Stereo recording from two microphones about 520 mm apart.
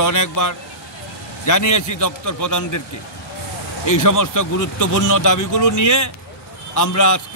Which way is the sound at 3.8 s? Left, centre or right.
Left.